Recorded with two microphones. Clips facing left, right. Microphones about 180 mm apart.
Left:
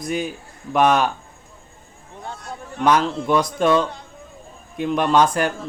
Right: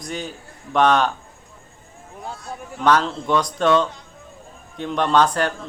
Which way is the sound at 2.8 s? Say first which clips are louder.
Left 1 dB; 10° left (ahead or behind).